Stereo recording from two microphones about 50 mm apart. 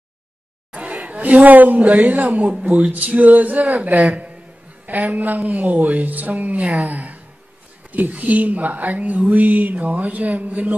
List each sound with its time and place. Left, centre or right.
0.7 s speech: right
3.7 s a sound: right
5.5 s speech: right
6.6 s speech: centre
6.9 s speech: right
7.9 s a sound: right